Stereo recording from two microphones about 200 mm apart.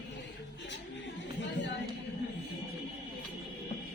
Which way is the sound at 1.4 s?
65° left (ahead or behind).